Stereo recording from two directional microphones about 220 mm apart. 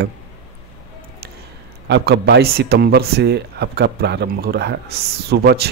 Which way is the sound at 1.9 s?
50° right (ahead or behind).